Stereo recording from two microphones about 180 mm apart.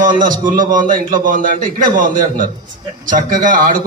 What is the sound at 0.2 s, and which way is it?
A man's voice, 50° right (ahead or behind).